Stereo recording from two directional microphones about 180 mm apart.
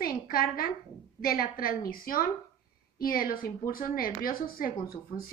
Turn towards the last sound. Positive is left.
turn(degrees=55)  # may be behind; listen again after turning